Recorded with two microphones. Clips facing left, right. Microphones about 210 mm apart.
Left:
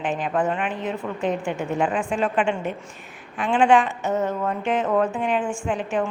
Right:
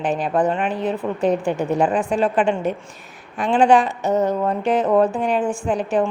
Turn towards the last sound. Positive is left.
turn(degrees=-35)  # may be behind; listen again after turning